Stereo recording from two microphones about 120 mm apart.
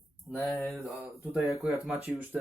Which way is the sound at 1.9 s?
15° right (ahead or behind).